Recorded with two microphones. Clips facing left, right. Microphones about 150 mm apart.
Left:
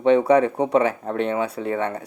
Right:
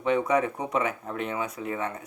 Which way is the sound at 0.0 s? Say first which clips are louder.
Left 8 dB; 30° left (ahead or behind).